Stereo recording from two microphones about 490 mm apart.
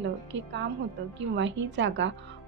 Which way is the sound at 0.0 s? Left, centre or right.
Right.